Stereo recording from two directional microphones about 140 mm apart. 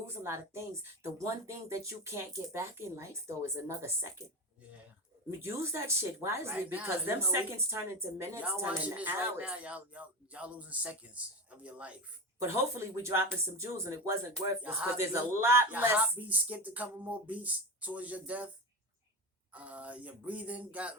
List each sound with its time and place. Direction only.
0.2 s a woman's voice: 20° right (ahead or behind)
5.4 s a woman's voice: 20° right (ahead or behind)
14.6 s speech: 10° right (ahead or behind)
19.5 s speech: 10° right (ahead or behind)